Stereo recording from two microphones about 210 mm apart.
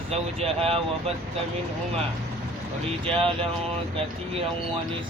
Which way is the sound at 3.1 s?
25° right (ahead or behind).